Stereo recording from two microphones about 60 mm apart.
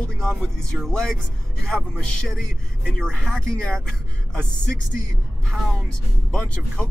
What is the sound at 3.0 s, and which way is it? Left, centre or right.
Speech, centre.